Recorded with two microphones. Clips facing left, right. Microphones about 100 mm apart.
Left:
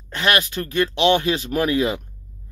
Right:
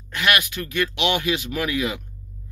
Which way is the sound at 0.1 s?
30° left (ahead or behind).